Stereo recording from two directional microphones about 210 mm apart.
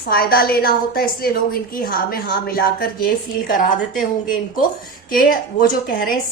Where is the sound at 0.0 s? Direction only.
45° left (ahead or behind).